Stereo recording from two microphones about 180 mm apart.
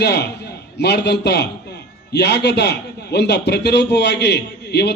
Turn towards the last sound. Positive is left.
turn(degrees=65)  # may be behind; listen again after turning